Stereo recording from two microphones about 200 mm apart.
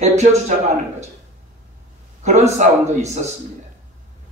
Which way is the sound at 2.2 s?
35° right (ahead or behind).